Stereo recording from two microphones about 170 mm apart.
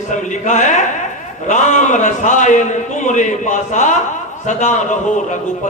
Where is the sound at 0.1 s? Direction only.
45° left (ahead or behind).